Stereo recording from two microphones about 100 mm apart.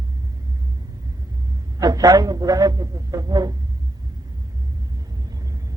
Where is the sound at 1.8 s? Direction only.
40° right (ahead or behind).